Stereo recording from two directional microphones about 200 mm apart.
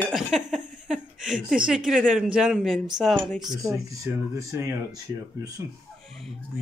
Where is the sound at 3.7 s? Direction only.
15° right (ahead or behind).